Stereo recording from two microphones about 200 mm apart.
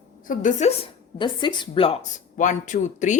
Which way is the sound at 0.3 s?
35° left (ahead or behind).